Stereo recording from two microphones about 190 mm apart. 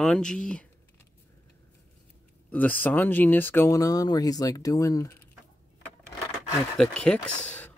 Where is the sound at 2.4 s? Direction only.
10° left (ahead or behind).